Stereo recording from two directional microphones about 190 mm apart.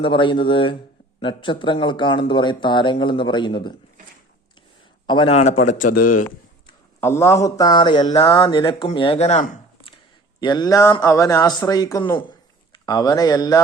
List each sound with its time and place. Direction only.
0.0 s speech: 25° left (ahead or behind)
5.0 s a man's voice: 25° left (ahead or behind); by 6.2 s 45° left (ahead or behind)
7.0 s speech: 15° left (ahead or behind); by 9.6 s 40° left (ahead or behind)
10.4 s speech: 20° left (ahead or behind)